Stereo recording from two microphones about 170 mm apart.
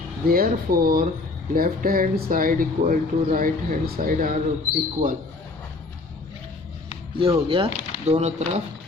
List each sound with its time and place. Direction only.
0.3 s speech: 60° right (ahead or behind)
7.2 s speech: 30° right (ahead or behind)